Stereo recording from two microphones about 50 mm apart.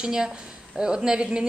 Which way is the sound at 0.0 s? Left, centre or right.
Centre.